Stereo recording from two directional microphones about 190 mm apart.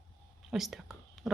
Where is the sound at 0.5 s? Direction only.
Centre (ahead or behind).